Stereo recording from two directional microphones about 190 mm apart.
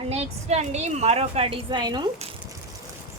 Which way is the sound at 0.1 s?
35° right (ahead or behind).